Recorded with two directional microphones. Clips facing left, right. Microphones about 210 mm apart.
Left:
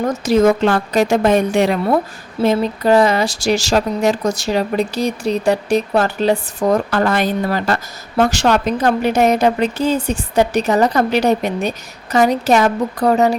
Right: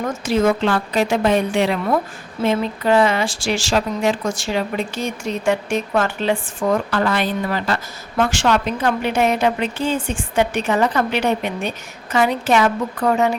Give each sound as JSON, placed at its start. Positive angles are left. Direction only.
{"t": 0.0, "sound": "a woman's voice", "side_deg": 40}